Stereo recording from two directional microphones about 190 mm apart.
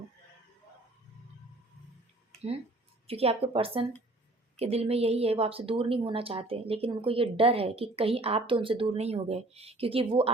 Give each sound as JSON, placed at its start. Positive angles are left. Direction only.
{"t": 3.1, "sound": "a woman's voice", "side_deg": -30}